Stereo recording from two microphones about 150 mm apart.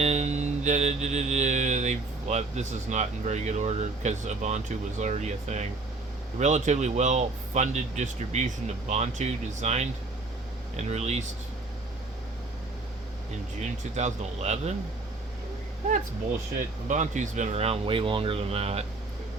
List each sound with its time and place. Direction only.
0.0 s mantra: 50° right (ahead or behind)
13.6 s mantra: 50° right (ahead or behind)
16.9 s mantra: 55° right (ahead or behind)